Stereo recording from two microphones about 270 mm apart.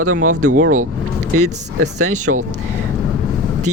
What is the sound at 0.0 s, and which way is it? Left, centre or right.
Speech, right.